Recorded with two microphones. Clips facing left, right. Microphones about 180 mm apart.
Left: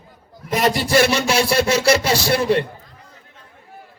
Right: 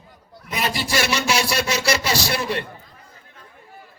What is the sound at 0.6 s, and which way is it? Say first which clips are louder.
Speech: left 7 dB; 65° left (ahead or behind).